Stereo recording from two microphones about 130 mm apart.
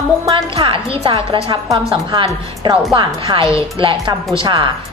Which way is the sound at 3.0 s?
35° right (ahead or behind).